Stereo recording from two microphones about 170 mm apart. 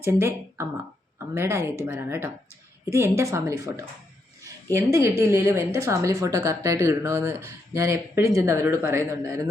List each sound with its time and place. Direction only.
0.0 s speech: 15° right (ahead or behind)